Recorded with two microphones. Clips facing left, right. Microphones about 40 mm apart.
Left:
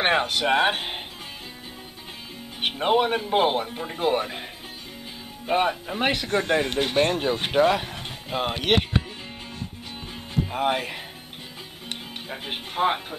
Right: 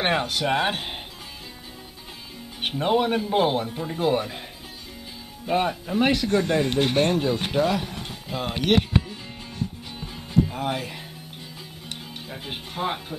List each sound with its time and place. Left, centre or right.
0.0 s speech: centre
2.6 s speech: centre
5.5 s speech: centre
6.7 s speech: centre
7.0 s speech: left
9.9 s music: centre
11.9 s speech: left